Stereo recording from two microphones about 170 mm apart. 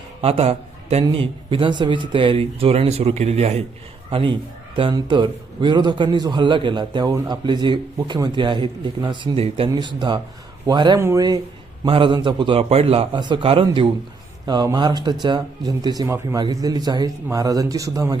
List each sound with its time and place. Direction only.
0.2 s a man's voice: 35° right (ahead or behind); by 11.3 s 20° right (ahead or behind)
11.9 s a man's voice: 30° right (ahead or behind)